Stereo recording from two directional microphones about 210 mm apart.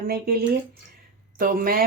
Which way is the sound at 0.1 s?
45° right (ahead or behind).